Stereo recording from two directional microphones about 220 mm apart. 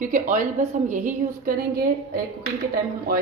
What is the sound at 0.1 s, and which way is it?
A woman's voice, 35° right (ahead or behind).